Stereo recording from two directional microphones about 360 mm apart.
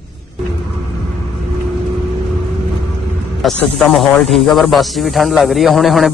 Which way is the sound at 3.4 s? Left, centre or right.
Centre.